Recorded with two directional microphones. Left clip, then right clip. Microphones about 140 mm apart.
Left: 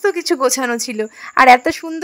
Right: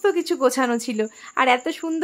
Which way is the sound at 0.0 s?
45° left (ahead or behind).